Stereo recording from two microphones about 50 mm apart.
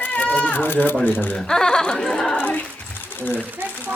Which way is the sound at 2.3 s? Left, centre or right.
Left.